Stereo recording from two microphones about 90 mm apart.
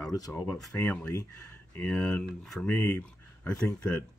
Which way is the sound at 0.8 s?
15° left (ahead or behind).